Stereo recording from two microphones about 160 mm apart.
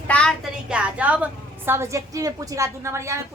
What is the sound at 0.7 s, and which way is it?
A woman's voice, 5° right (ahead or behind).